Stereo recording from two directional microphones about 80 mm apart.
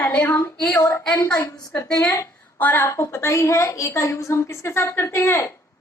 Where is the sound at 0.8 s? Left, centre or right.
Left.